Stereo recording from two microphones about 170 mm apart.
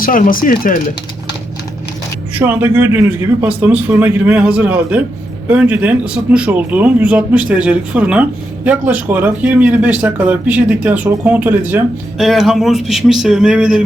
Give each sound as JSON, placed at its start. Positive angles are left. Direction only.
{"t": 0.0, "sound": "speech", "side_deg": 55}
{"t": 2.3, "sound": "speech", "side_deg": -10}